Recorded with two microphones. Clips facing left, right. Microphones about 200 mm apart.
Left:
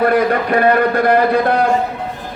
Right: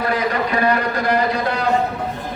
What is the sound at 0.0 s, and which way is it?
A man's voice, 55° left (ahead or behind).